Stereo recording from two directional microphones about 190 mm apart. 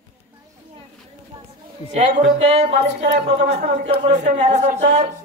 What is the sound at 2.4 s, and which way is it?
Speech, 35° right (ahead or behind).